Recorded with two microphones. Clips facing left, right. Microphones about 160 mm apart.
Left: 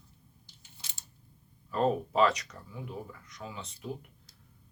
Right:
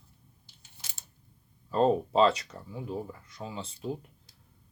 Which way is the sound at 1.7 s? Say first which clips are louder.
Right 4 dB; 25° right (ahead or behind).